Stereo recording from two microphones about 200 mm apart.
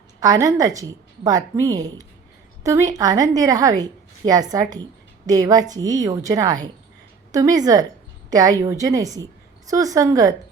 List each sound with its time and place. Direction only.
0.2 s a woman's voice: 20° right (ahead or behind)